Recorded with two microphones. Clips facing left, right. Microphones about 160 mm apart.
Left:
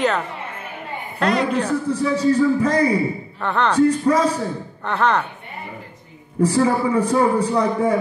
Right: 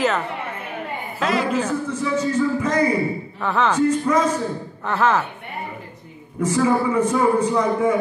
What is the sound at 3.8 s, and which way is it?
Speech, 35° left (ahead or behind).